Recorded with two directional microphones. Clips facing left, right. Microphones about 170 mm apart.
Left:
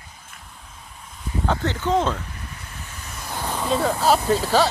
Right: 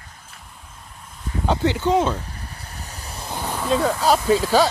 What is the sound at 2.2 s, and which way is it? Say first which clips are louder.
Vehicle: right 1 dB; 35° right (ahead or behind).